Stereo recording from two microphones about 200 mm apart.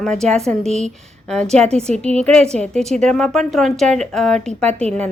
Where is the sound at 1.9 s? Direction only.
30° right (ahead or behind).